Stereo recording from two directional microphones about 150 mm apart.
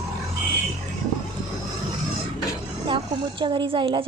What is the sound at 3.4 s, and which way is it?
Speech, 35° right (ahead or behind).